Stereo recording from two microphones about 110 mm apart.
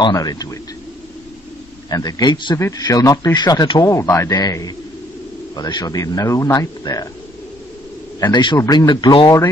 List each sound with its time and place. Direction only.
0.0 s speech: 35° left (ahead or behind)
1.9 s speech: 35° left (ahead or behind)
2.5 s speech: 30° left (ahead or behind)
8.2 s a man's voice: 40° left (ahead or behind)